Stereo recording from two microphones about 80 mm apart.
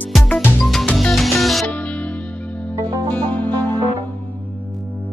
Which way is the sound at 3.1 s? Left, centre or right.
Left.